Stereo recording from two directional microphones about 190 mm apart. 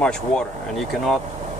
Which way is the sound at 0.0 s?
5° left (ahead or behind).